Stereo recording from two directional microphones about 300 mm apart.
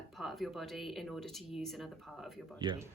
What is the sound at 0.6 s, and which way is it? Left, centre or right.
Speech, centre.